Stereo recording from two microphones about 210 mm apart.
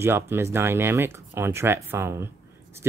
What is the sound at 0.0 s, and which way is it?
Speech, 10° right (ahead or behind).